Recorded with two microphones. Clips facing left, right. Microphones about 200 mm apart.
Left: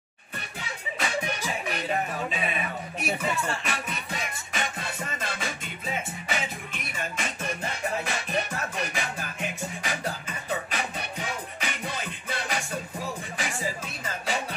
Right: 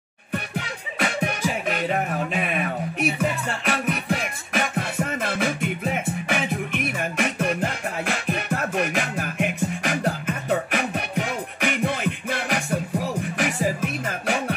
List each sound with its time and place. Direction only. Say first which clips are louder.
1.0 s music: right 6 dB; 55° right (ahead or behind)
3.6 s music: right 9 dB; 55° right (ahead or behind)